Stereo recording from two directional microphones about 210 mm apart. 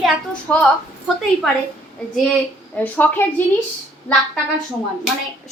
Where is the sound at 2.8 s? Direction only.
10° left (ahead or behind).